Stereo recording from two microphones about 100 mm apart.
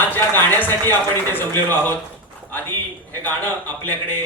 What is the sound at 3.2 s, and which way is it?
A man's voice, 20° left (ahead or behind).